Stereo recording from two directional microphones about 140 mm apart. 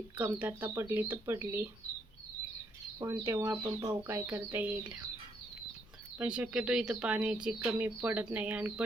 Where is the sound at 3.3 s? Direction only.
20° right (ahead or behind).